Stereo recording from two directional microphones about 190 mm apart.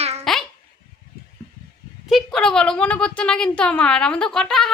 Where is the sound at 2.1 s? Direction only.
Centre (ahead or behind).